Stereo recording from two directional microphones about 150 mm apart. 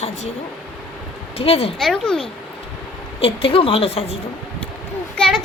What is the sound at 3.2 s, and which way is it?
Speech, 40° left (ahead or behind).